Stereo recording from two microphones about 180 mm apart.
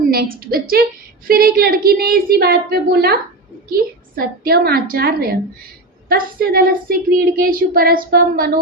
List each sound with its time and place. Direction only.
0.1 s a woman's voice: 55° right (ahead or behind)